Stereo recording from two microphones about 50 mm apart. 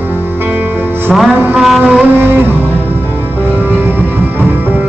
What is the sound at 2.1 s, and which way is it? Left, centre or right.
Music, right.